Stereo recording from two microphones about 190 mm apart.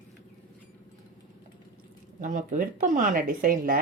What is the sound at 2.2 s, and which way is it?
A woman's voice, 45° right (ahead or behind).